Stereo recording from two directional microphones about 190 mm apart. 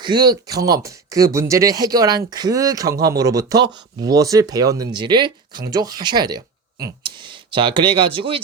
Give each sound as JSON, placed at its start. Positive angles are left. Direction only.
{"t": 0.0, "sound": "speech", "side_deg": -25}